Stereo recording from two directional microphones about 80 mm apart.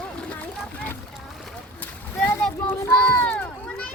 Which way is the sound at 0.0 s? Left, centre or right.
Centre.